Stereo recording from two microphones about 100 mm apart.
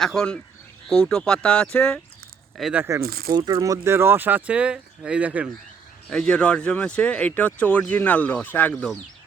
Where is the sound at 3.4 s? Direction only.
50° right (ahead or behind).